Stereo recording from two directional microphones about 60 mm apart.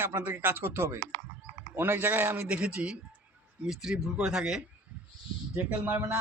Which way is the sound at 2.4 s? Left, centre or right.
Right.